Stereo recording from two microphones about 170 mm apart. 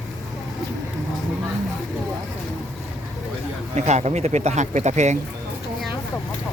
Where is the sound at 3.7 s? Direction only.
40° right (ahead or behind).